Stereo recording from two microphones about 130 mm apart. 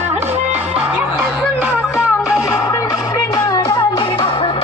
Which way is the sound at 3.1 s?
30° left (ahead or behind).